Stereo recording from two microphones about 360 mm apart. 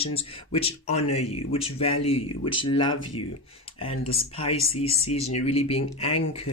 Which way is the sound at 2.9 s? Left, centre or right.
Left.